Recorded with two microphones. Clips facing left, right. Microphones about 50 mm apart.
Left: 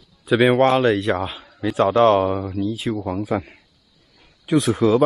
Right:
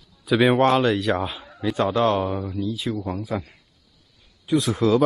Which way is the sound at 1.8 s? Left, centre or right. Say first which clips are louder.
Left 6 dB; left.